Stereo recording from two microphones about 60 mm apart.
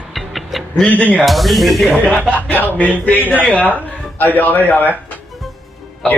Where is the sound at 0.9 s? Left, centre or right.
Left.